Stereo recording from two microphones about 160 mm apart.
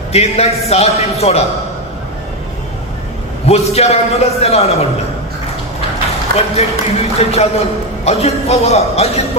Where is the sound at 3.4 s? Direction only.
40° left (ahead or behind).